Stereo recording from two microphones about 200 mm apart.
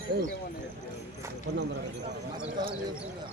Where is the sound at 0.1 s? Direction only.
50° right (ahead or behind).